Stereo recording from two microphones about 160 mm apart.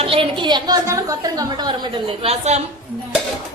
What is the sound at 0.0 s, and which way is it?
A woman's voice, 35° right (ahead or behind).